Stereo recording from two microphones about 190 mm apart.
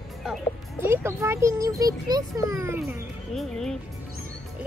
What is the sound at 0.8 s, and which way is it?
A child's voice, 10° right (ahead or behind).